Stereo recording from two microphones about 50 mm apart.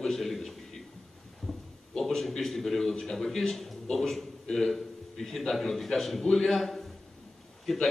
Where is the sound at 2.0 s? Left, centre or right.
Centre.